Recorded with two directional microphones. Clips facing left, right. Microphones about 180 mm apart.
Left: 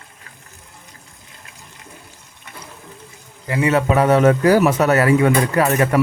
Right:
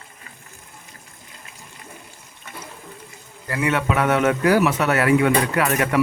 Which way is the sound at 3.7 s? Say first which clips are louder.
Left 5 dB; 35° left (ahead or behind).